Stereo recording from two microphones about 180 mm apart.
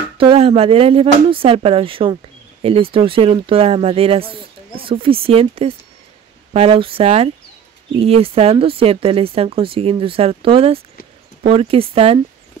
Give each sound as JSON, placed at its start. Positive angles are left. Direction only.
{"t": 0.2, "sound": "speech", "side_deg": -30}